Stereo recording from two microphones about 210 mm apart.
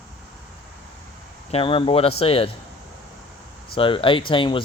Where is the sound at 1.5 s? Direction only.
25° left (ahead or behind).